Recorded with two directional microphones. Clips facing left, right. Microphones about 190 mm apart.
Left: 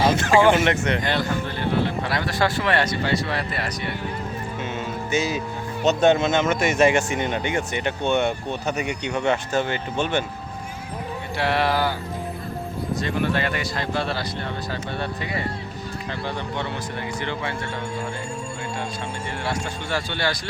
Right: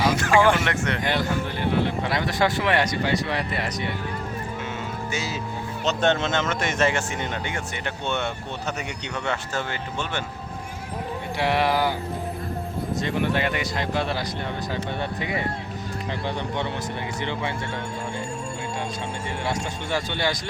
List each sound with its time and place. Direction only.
0.2 s speech: 25° left (ahead or behind)
1.6 s speech: 15° right (ahead or behind)
5.1 s speech: 20° left (ahead or behind)
11.3 s speech: 15° right (ahead or behind)
13.0 s speech: 20° right (ahead or behind)
19.5 s speech: 20° right (ahead or behind)